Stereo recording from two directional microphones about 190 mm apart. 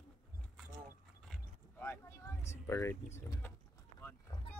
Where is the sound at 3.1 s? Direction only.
15° left (ahead or behind).